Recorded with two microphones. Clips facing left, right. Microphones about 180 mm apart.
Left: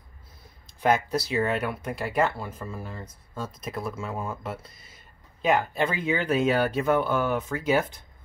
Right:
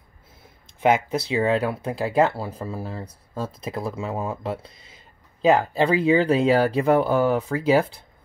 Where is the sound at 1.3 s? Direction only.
30° right (ahead or behind).